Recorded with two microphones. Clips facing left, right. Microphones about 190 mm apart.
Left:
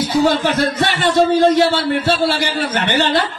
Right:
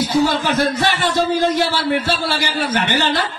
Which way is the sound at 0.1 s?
60° left (ahead or behind).